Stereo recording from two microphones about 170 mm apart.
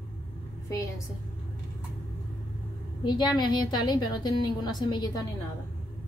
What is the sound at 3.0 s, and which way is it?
Speech, 25° left (ahead or behind).